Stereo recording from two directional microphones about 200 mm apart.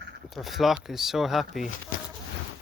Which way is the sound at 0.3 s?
Centre (ahead or behind).